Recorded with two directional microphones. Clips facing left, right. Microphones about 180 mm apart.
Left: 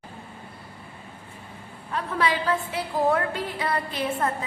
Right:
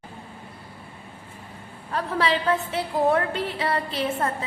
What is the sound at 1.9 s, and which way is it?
A woman's voice, 35° right (ahead or behind).